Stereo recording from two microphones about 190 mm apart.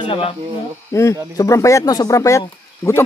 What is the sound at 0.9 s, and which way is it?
Speech, 15° left (ahead or behind).